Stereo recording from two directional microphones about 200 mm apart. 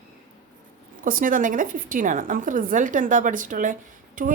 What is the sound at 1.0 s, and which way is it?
A woman's voice, 45° right (ahead or behind).